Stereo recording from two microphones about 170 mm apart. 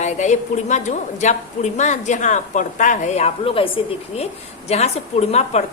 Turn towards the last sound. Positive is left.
turn(degrees=40)  # may be behind; listen again after turning